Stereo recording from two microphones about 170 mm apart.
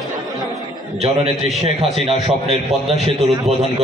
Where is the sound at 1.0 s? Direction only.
35° right (ahead or behind).